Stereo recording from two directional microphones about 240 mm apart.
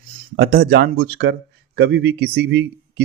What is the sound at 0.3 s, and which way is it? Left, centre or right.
Speech, right.